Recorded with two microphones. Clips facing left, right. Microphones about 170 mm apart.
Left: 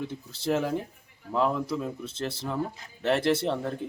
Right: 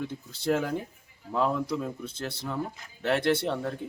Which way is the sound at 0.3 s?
5° left (ahead or behind).